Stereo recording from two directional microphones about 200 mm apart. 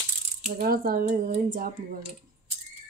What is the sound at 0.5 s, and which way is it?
Speech, 45° right (ahead or behind).